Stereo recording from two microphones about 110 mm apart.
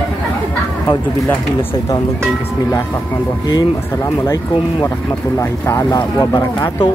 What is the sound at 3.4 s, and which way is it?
Speech, 40° left (ahead or behind).